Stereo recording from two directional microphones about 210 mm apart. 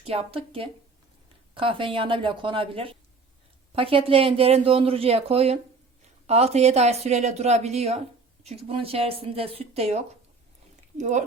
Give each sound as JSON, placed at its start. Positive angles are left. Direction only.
{"t": 0.0, "sound": "speech", "side_deg": -30}